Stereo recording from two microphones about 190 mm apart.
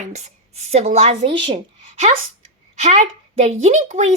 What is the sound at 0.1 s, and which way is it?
A woman's voice, 35° right (ahead or behind).